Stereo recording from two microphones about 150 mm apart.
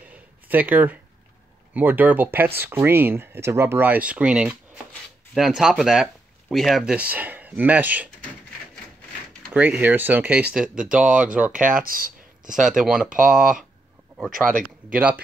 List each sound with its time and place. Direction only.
0.1 s a sound: 10° right (ahead or behind)
1.7 s speech: 10° right (ahead or behind)
9.5 s speech: 10° right (ahead or behind)
11.5 s speech: 65° right (ahead or behind)
12.6 s speech: 5° right (ahead or behind)
13.2 s speech: 65° right (ahead or behind)
14.9 s speech: 10° right (ahead or behind)